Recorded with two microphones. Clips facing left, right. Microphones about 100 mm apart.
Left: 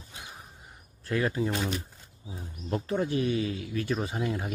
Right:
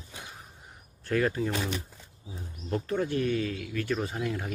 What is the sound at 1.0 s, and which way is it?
Speech, 5° left (ahead or behind).